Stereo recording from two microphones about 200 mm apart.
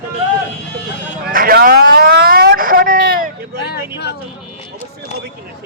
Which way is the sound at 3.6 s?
55° left (ahead or behind).